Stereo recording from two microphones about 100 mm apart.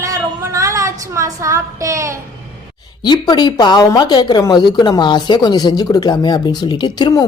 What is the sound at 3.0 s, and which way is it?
Speech, 45° left (ahead or behind).